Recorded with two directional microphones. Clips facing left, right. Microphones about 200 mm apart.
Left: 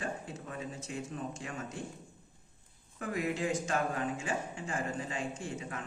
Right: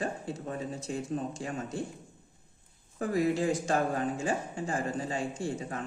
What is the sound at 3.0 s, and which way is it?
Speech, 35° right (ahead or behind).